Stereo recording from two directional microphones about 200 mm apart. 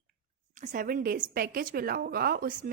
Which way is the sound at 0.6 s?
40° right (ahead or behind).